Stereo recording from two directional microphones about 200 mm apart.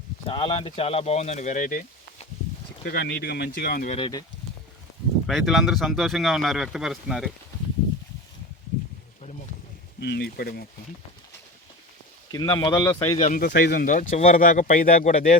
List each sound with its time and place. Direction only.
0.3 s speech: 25° left (ahead or behind); by 2.2 s 40° left (ahead or behind)
2.8 s speech: 55° left (ahead or behind)
3.9 s speech: 25° left (ahead or behind)
5.2 s speech: centre (ahead or behind)
10.0 s speech: 55° left (ahead or behind)
12.3 s speech: 20° left (ahead or behind)
13.1 s speech: 40° left (ahead or behind)
13.5 s speech: 55° left (ahead or behind)